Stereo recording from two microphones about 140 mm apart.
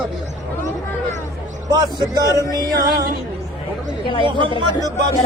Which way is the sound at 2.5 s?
30° right (ahead or behind).